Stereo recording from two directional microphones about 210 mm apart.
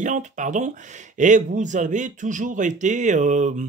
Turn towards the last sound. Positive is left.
turn(degrees=-35)  # may be behind; listen again after turning